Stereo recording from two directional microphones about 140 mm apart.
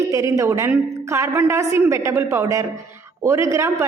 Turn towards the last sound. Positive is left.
turn(degrees=-20)  # may be behind; listen again after turning